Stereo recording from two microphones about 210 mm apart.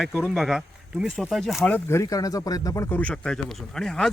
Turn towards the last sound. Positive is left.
turn(degrees=5)  # may be behind; listen again after turning